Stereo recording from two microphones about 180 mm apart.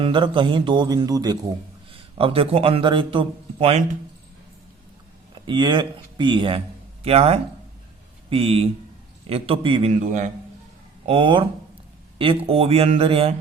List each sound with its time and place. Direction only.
0.0 s a man's voice: 25° right (ahead or behind)
5.3 s speech: 25° right (ahead or behind)
9.9 s a man's voice: 45° right (ahead or behind)
11.0 s speech: 30° right (ahead or behind)